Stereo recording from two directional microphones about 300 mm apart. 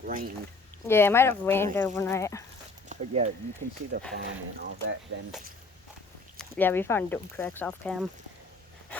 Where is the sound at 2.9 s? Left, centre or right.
Right.